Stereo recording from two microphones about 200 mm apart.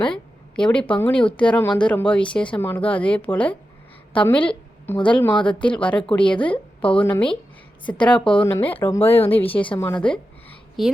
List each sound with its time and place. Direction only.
0.1 s a woman's voice: 5° left (ahead or behind)
5.3 s speech: 25° left (ahead or behind)
5.6 s a woman's voice: 5° left (ahead or behind)